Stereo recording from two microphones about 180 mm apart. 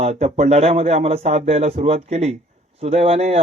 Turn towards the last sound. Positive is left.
turn(degrees=-35)  # may be behind; listen again after turning